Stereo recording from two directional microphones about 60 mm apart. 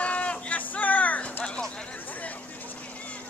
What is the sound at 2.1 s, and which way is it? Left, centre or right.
Vehicle, left.